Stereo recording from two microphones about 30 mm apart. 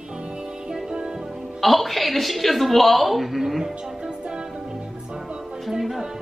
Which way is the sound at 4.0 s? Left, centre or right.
Right.